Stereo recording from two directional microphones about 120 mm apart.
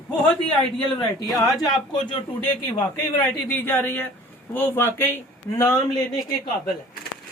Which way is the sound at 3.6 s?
15° left (ahead or behind).